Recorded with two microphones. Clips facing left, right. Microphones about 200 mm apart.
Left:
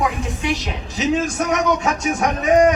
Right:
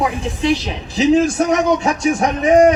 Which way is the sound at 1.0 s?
30° right (ahead or behind).